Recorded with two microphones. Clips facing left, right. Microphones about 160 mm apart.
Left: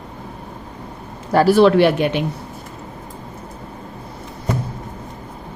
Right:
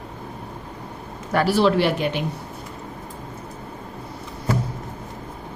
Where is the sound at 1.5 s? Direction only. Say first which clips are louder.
Left 7 dB; 60° left (ahead or behind).